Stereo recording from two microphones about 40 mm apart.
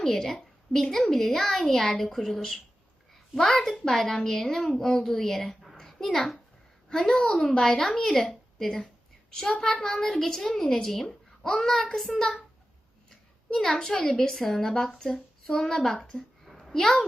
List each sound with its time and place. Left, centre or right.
0.0 s a woman's voice: centre
12.1 s a woman's voice: centre
13.7 s a woman's voice: centre
16.0 s a woman's voice: centre
16.6 s a child's voice: centre